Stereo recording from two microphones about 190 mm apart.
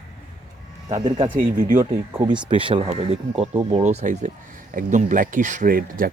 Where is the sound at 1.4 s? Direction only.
45° right (ahead or behind).